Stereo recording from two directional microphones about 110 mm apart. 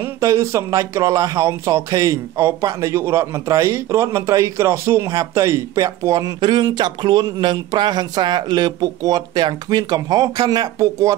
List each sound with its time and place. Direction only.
0.0 s speech: 30° right (ahead or behind)